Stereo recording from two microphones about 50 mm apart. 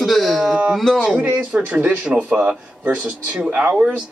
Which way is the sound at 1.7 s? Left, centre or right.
Right.